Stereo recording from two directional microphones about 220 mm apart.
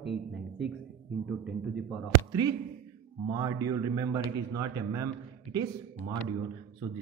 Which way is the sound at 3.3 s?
15° right (ahead or behind).